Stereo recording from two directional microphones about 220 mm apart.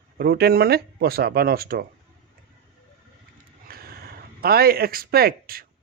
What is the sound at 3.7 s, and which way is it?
Speech, 45° right (ahead or behind).